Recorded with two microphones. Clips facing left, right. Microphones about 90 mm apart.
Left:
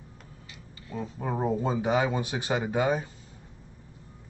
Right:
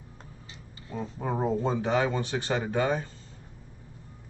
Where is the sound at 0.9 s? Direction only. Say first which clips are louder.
Even; centre (ahead or behind).